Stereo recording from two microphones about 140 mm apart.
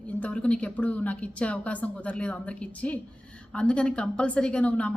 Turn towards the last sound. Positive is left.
turn(degrees=10)  # may be behind; listen again after turning